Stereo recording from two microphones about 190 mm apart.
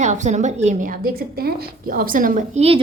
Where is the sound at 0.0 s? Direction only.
40° right (ahead or behind).